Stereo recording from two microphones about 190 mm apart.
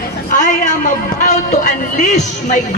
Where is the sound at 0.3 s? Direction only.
40° left (ahead or behind).